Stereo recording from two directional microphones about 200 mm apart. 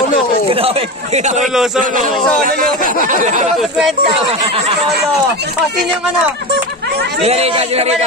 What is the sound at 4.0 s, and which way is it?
Speech, 30° right (ahead or behind).